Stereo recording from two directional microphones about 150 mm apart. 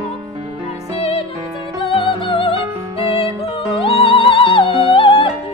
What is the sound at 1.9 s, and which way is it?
Music, 35° left (ahead or behind).